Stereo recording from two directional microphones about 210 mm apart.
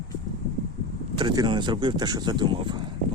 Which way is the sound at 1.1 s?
20° right (ahead or behind).